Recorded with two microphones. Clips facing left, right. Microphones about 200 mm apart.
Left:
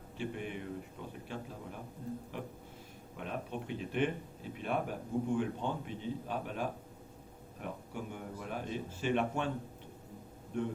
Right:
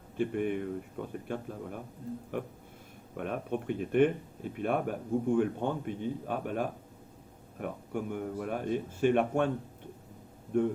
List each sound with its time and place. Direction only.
0.2 s speech: 55° right (ahead or behind)
10.5 s speech: 50° right (ahead or behind)